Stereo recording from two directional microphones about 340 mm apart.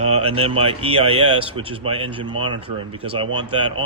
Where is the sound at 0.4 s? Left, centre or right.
Centre.